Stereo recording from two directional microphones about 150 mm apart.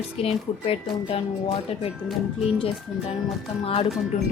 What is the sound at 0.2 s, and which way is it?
Speech, 40° left (ahead or behind).